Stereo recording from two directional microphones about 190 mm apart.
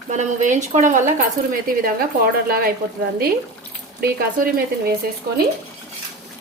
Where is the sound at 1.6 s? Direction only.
50° right (ahead or behind).